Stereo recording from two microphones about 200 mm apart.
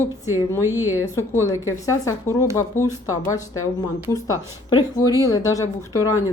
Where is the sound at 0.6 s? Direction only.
10° right (ahead or behind).